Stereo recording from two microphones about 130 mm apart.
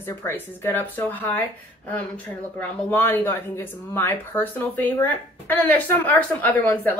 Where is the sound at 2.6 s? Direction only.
15° left (ahead or behind).